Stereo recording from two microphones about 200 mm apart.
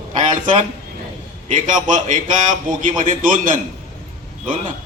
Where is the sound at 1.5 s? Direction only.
40° right (ahead or behind).